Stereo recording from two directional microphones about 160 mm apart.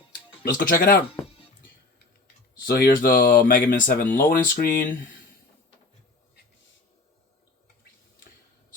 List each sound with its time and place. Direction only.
0.4 s speech: 60° left (ahead or behind)
2.6 s speech: 75° left (ahead or behind); by 4.9 s 55° left (ahead or behind)